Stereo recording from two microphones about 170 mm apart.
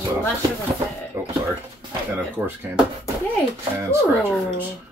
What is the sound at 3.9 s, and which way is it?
Speech, 15° right (ahead or behind).